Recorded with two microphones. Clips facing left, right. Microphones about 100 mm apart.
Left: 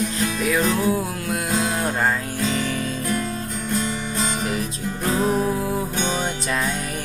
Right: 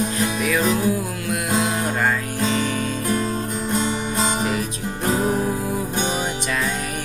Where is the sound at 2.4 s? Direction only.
35° right (ahead or behind).